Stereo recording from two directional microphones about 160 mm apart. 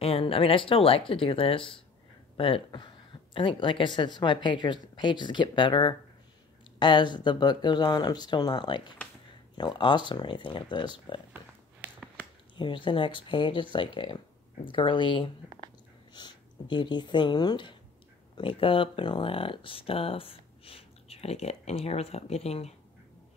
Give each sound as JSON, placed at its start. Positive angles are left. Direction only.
{"t": 0.0, "sound": "speech", "side_deg": 35}
{"t": 12.5, "sound": "speech", "side_deg": 30}